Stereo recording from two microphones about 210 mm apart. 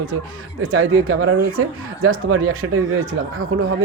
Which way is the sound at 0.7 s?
80° right.